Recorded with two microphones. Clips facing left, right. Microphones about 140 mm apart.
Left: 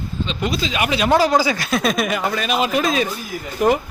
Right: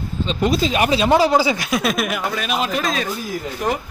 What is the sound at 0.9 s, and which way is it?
Speech, 20° right (ahead or behind).